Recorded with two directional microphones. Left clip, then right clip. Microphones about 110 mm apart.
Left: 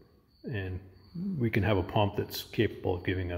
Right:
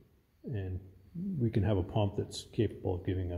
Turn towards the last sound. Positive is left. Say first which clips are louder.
# left 4 dB
turn(degrees=-25)  # may be behind; listen again after turning